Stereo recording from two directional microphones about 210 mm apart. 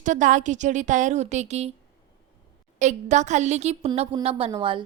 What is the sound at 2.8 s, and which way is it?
A woman's voice, 35° right (ahead or behind).